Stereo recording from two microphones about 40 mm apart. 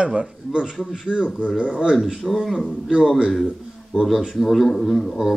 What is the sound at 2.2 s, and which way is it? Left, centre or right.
Speech, centre.